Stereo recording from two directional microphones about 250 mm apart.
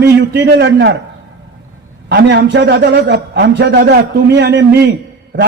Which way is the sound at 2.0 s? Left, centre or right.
Right.